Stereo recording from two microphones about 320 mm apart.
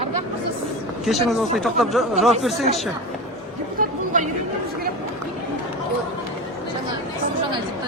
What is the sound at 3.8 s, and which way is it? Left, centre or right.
Chatter, right.